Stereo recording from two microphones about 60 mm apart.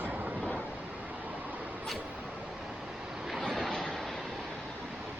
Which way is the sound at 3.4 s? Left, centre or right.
Centre.